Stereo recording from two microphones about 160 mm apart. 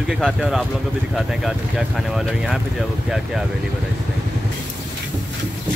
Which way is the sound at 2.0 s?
Centre (ahead or behind).